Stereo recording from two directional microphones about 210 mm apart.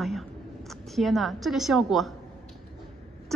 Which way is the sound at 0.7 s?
Centre (ahead or behind).